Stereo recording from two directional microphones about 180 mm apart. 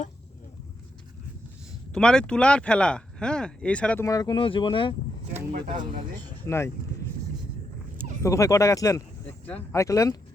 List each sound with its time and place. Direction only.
1.9 s speech: 5° left (ahead or behind)
4.0 s speech: 20° left (ahead or behind)
5.5 s speech: 45° right (ahead or behind)
6.4 s speech: 15° left (ahead or behind)
8.2 s speech: 15° left (ahead or behind)